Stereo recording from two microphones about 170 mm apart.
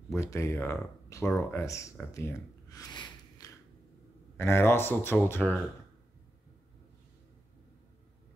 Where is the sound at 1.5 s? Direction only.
15° left (ahead or behind).